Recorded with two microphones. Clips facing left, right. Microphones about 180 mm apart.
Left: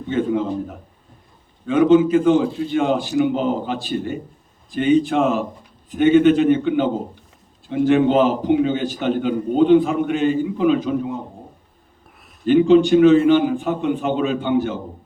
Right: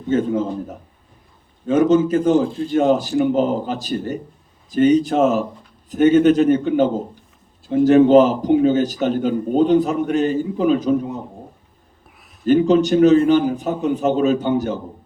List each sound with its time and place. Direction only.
0.1 s a man's voice: 40° right (ahead or behind)
12.5 s a man's voice: 40° right (ahead or behind)